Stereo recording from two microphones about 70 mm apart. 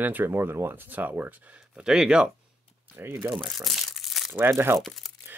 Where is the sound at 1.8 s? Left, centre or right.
Centre.